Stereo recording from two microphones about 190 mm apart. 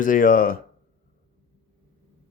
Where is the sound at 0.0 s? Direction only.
45° left (ahead or behind).